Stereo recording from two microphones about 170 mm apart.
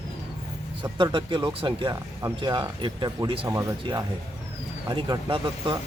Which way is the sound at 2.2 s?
15° right (ahead or behind).